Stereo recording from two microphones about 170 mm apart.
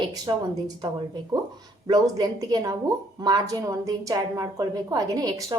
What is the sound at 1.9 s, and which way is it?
A woman's voice, 25° right (ahead or behind).